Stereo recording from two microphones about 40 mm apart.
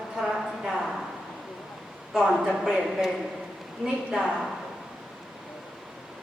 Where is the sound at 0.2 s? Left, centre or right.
Centre.